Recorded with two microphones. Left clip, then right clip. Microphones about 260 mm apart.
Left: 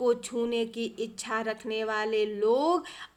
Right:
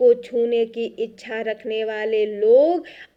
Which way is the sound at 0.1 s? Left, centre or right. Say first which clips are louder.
Right 10 dB; centre.